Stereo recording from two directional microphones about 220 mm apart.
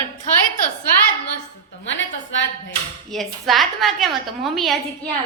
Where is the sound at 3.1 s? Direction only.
Centre (ahead or behind).